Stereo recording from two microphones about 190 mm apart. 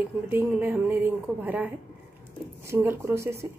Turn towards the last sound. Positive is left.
turn(degrees=-15)  # may be behind; listen again after turning